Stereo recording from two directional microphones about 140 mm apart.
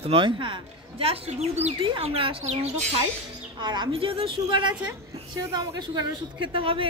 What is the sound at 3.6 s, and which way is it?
Speech, 30° right (ahead or behind).